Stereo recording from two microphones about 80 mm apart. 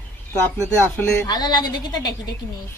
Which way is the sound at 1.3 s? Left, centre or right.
Left.